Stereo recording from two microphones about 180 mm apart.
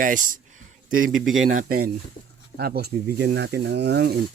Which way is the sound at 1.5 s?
55° right (ahead or behind).